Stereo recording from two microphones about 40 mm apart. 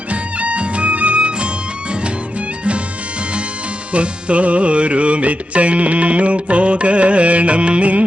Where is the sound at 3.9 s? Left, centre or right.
Right.